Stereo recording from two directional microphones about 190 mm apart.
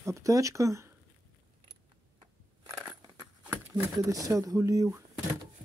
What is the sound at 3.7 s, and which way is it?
Speech, 20° right (ahead or behind).